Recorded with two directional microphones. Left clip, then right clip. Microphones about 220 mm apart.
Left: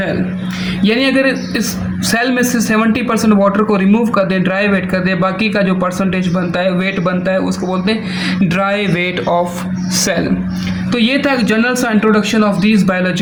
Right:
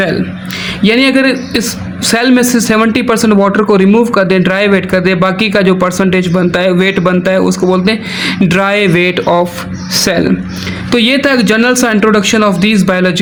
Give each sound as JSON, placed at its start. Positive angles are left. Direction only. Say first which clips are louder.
{"t": 0.8, "sound": "a man's voice", "louder": "right 4 dB", "side_deg": -45}
{"t": 9.9, "sound": "speech", "louder": "right 4 dB", "side_deg": -25}
{"t": 10.9, "sound": "a man's voice", "louder": "right 5 dB", "side_deg": -45}